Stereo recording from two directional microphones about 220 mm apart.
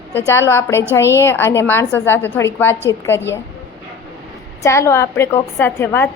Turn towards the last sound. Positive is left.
turn(degrees=10)  # may be behind; listen again after turning